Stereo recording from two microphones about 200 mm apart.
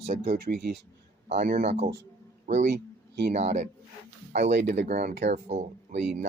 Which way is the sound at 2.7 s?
55° right (ahead or behind).